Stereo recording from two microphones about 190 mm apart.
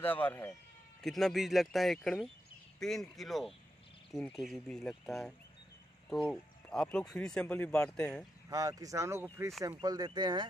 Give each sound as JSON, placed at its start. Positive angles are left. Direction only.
{"t": 0.0, "sound": "speech", "side_deg": 10}
{"t": 8.5, "sound": "speech", "side_deg": -20}